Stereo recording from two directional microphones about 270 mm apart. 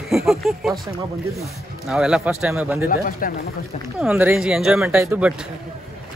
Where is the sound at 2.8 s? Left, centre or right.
Left.